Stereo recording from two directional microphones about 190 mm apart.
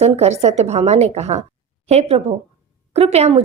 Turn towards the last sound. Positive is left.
turn(degrees=-35)  # may be behind; listen again after turning